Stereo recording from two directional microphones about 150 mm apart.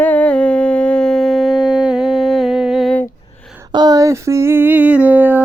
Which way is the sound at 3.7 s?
25° right (ahead or behind).